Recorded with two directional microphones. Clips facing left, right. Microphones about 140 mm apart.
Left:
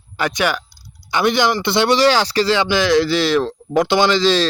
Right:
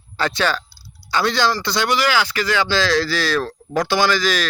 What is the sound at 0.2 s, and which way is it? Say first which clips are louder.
Speech: left 1 dB; 15° left (ahead or behind).